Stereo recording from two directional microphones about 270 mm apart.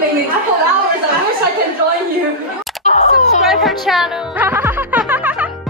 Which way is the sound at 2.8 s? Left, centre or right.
Left.